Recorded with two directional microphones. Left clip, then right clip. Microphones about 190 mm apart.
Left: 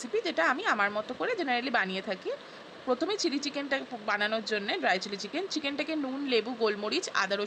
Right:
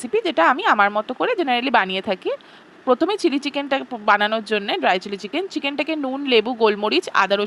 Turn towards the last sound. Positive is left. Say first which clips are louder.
# right 11 dB
turn(degrees=-45)  # may be behind; listen again after turning